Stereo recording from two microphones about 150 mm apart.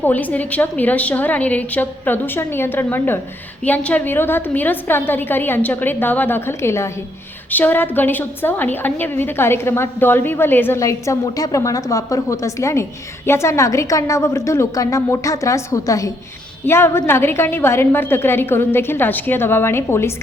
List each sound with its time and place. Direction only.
0.0 s a woman's voice: 10° left (ahead or behind)